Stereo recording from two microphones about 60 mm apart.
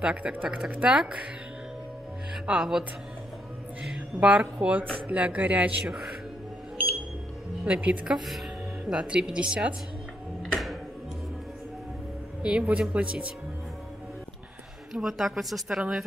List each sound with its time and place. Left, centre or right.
0.0 s a woman's voice: right
2.4 s speech: centre
4.2 s a woman's voice: centre
7.6 s a woman's voice: right
8.3 s music: centre
8.9 s speech: centre
10.4 s music: centre
12.4 s a woman's voice: centre
14.9 s speech: centre